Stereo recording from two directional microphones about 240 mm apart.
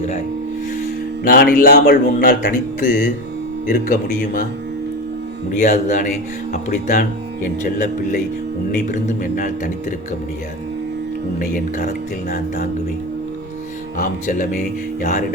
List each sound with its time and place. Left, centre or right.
1.2 s speech: left
5.5 s speech: left
11.3 s speech: left
14.0 s speech: left